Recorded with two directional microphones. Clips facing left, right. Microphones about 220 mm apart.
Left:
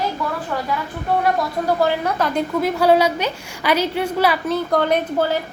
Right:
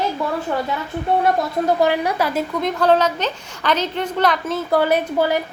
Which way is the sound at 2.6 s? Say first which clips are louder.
Left 1 dB; 10° left (ahead or behind).